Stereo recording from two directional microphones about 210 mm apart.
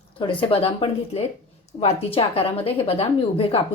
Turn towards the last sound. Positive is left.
turn(degrees=25)  # may be behind; listen again after turning